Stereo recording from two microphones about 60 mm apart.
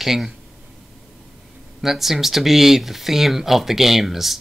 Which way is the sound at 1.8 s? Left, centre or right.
Centre.